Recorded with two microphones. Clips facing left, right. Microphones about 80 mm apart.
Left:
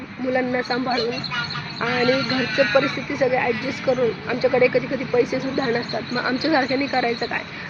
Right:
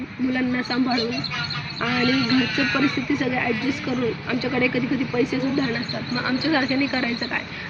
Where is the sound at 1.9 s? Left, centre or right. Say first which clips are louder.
Left 1 dB; centre.